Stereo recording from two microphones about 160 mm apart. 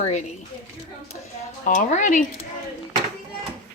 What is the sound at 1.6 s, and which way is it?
Speech, 50° left (ahead or behind).